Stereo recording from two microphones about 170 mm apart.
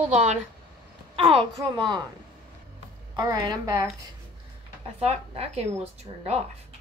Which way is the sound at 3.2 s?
25° right (ahead or behind).